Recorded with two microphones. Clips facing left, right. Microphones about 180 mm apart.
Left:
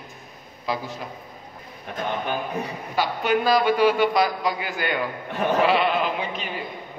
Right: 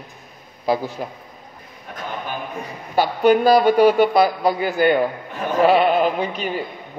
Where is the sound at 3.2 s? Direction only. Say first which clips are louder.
Right 7 dB; 35° right (ahead or behind).